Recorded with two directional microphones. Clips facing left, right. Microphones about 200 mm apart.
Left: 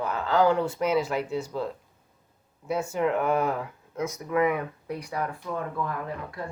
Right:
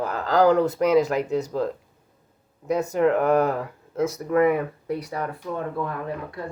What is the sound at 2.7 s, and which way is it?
Speech, 40° right (ahead or behind).